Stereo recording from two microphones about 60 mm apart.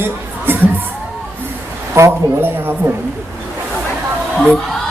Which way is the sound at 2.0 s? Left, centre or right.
Right.